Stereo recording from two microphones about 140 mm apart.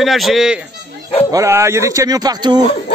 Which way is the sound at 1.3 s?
20° right (ahead or behind).